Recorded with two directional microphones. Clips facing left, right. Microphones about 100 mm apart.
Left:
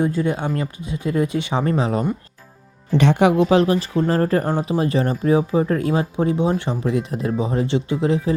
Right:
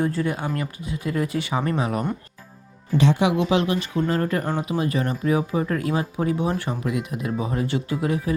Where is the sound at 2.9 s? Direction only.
60° left (ahead or behind); by 8.3 s 25° left (ahead or behind).